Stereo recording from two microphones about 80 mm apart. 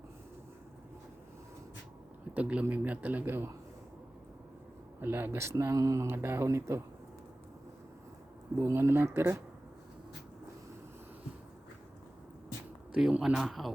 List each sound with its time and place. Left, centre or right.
2.3 s a man's voice: centre
4.9 s speech: right
6.1 s speech: right
8.6 s speech: right
12.9 s speech: centre